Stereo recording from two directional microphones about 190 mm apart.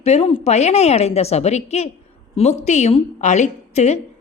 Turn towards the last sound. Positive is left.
turn(degrees=35)  # may be behind; listen again after turning